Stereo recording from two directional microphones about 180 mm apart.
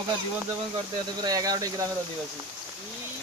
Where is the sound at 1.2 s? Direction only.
20° right (ahead or behind).